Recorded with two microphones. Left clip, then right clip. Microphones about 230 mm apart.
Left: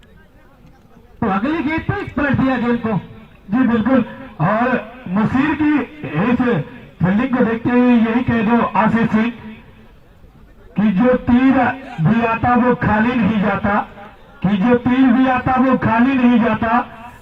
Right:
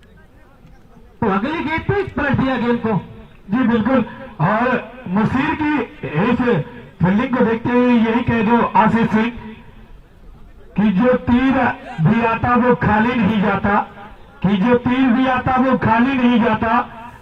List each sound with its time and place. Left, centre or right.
1.2 s a man's voice: right
10.8 s a man's voice: right